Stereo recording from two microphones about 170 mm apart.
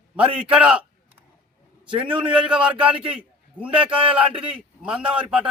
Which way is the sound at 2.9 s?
30° right (ahead or behind).